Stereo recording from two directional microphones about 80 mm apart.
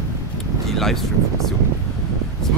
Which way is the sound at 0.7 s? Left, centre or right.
Centre.